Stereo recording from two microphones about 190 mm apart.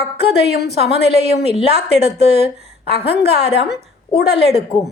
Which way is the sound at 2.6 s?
30° right (ahead or behind).